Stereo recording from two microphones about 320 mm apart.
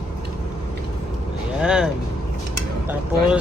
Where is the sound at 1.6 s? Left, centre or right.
Centre.